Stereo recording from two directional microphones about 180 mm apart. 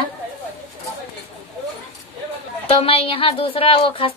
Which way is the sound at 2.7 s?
30° left (ahead or behind).